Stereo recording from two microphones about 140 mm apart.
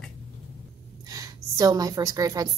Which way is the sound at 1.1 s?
25° right (ahead or behind).